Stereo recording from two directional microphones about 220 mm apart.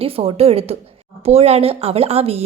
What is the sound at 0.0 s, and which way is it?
Speech, 25° right (ahead or behind).